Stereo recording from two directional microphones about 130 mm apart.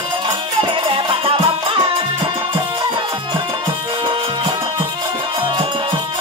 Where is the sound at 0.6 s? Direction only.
40° right (ahead or behind).